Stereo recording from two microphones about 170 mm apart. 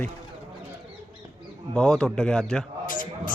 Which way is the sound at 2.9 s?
50° left (ahead or behind).